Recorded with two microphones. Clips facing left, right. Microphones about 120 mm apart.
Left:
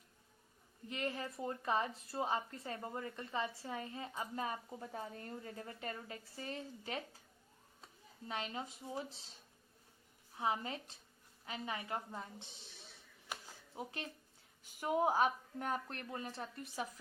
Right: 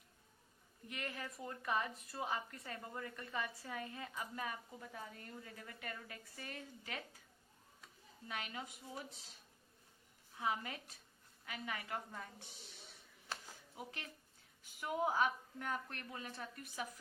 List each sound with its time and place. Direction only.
0.9 s speech: 30° left (ahead or behind)
8.3 s speech: 30° left (ahead or behind)
10.3 s speech: 30° left (ahead or behind)
13.7 s a woman's voice: 30° left (ahead or behind)